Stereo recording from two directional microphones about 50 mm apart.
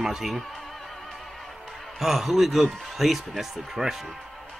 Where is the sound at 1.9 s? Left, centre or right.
Centre.